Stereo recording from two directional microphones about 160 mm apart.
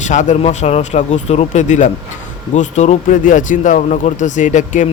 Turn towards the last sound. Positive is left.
turn(degrees=50)  # may be behind; listen again after turning